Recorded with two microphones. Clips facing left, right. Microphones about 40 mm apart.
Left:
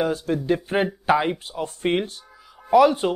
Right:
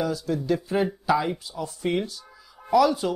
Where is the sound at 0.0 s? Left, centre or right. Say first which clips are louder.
Left 3 dB; left.